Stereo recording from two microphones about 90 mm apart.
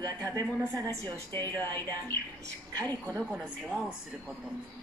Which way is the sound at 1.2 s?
25° left (ahead or behind).